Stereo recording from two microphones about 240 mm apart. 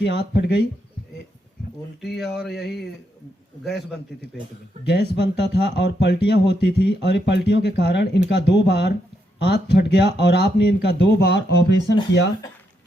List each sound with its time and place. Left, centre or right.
0.0 s speech: left
2.0 s speech: centre
3.6 s speech: centre
4.8 s speech: left